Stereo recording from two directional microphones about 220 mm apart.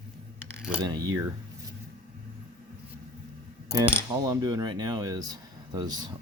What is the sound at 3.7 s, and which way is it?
Speech, 10° right (ahead or behind).